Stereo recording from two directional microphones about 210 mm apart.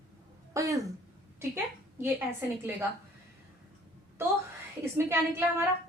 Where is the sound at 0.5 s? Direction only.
15° right (ahead or behind).